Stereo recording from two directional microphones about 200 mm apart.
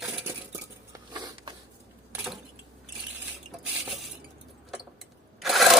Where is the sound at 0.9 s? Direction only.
20° right (ahead or behind).